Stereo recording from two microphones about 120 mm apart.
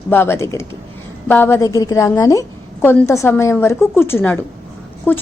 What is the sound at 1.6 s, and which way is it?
A woman's voice, 30° left (ahead or behind).